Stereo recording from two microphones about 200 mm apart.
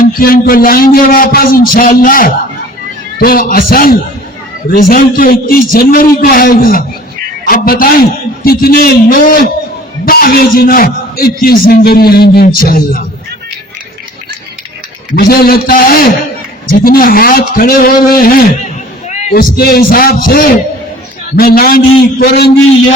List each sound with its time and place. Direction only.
0.2 s a man's voice: 45° left (ahead or behind)
15.1 s a man's voice: 50° left (ahead or behind)